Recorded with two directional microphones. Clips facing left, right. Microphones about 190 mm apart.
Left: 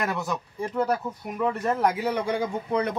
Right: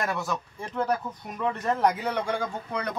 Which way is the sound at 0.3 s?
10° left (ahead or behind).